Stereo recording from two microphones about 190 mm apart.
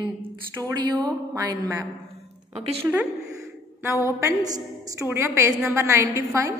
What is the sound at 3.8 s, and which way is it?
A woman's voice, 15° right (ahead or behind).